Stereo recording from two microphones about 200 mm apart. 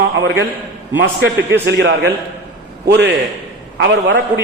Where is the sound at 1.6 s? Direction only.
55° right (ahead or behind).